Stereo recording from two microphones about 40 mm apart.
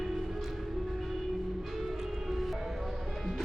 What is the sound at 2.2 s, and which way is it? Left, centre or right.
Music, centre.